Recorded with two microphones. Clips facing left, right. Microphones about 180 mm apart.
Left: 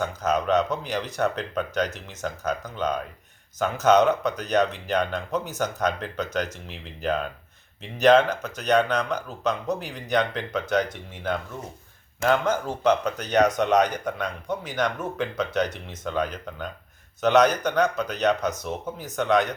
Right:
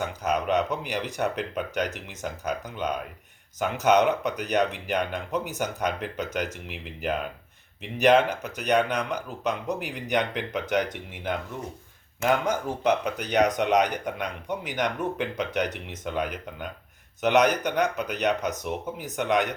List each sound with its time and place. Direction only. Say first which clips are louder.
0.0 s speech: left 2 dB; 15° right (ahead or behind)